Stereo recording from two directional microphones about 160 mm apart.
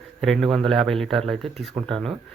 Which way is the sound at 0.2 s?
Centre (ahead or behind).